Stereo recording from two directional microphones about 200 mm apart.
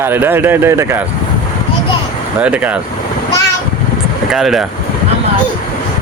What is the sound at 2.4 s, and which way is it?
Speech, 5° right (ahead or behind).